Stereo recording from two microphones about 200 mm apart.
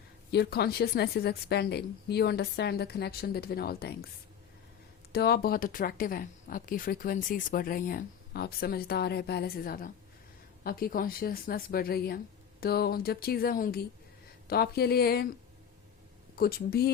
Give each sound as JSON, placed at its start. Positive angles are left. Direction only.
{"t": 0.3, "sound": "speech", "side_deg": 55}
{"t": 5.1, "sound": "speech", "side_deg": 50}
{"t": 16.3, "sound": "speech", "side_deg": 50}